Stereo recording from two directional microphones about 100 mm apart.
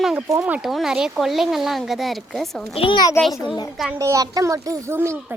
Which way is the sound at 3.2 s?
25° left (ahead or behind).